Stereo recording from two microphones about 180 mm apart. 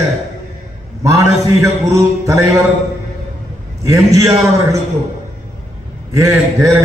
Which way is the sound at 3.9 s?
20° right (ahead or behind).